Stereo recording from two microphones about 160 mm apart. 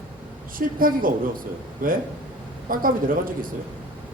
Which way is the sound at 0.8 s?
60° right (ahead or behind).